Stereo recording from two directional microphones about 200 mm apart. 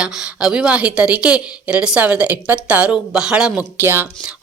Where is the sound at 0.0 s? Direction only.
5° right (ahead or behind).